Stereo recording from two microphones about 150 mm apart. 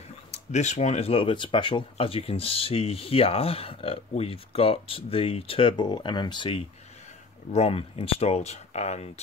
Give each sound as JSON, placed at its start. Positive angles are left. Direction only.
{"t": 0.3, "sound": "speech", "side_deg": 50}